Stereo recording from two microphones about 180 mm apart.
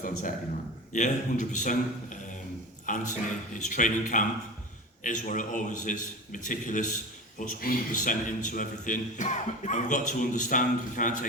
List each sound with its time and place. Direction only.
0.0 s a man's voice: 50° left (ahead or behind)